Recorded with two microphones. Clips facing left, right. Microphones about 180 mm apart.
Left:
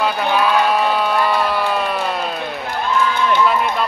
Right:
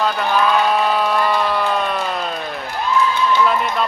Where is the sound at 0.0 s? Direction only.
5° left (ahead or behind).